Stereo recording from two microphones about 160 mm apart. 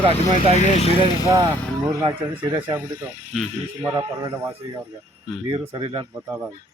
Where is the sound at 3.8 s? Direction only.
25° right (ahead or behind).